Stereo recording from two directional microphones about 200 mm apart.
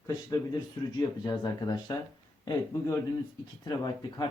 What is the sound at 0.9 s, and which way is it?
Speech, 20° left (ahead or behind).